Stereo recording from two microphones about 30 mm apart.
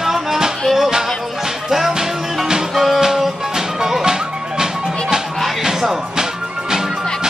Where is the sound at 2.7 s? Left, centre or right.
Centre.